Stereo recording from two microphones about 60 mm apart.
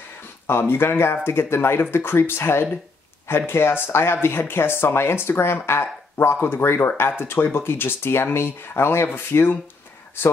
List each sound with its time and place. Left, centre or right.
0.5 s speech: left